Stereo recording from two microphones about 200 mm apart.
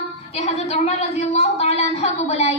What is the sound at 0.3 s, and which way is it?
A woman's voice, 35° left (ahead or behind).